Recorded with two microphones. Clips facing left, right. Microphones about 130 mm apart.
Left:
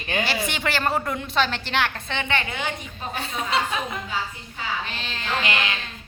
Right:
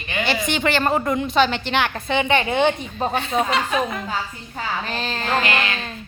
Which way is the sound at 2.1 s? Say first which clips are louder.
Right 8 dB; 15° right (ahead or behind).